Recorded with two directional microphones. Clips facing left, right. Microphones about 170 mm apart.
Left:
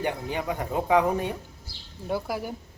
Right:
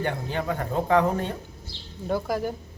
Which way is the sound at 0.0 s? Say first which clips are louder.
Right 1 dB; 15° left (ahead or behind).